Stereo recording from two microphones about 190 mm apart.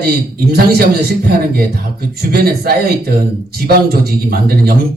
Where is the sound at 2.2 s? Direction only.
55° right (ahead or behind).